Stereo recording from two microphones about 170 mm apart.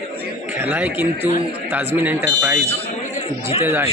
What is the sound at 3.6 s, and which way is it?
Speech, 15° right (ahead or behind).